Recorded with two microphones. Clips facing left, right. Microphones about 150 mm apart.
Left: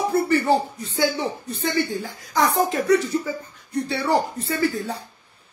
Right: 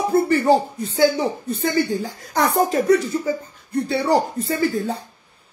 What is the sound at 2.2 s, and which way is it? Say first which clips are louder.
Speech: right 1 dB; 60° right (ahead or behind).